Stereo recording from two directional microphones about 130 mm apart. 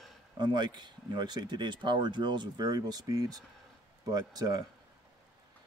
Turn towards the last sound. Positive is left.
turn(degrees=-30)  # may be behind; listen again after turning